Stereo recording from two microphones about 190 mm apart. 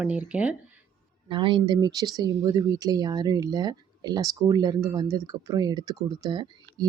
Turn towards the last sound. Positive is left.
turn(degrees=-20)  # may be behind; listen again after turning